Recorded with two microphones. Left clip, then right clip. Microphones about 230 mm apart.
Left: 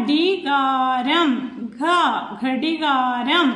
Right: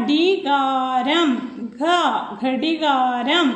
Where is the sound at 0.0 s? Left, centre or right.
Centre.